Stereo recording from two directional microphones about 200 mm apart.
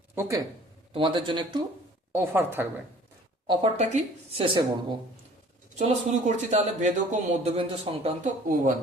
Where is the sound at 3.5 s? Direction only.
30° right (ahead or behind).